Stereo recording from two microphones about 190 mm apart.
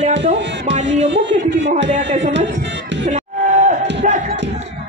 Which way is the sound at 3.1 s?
40° right (ahead or behind).